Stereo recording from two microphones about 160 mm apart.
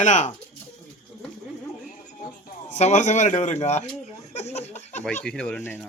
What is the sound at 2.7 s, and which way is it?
A man's voice, 45° left (ahead or behind).